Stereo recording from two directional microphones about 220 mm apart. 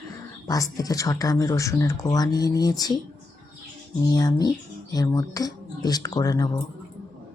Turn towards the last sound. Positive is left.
turn(degrees=15)  # may be behind; listen again after turning